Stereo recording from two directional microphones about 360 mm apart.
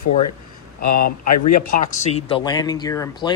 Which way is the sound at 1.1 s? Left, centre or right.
Left.